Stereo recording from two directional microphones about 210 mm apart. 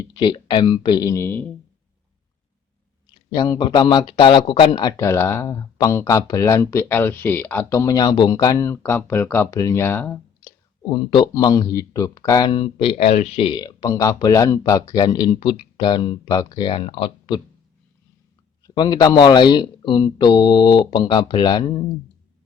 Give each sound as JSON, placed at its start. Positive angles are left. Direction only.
{"t": 0.1, "sound": "speech", "side_deg": 20}
{"t": 3.2, "sound": "speech", "side_deg": 15}
{"t": 10.9, "sound": "speech", "side_deg": 20}
{"t": 18.6, "sound": "speech", "side_deg": 20}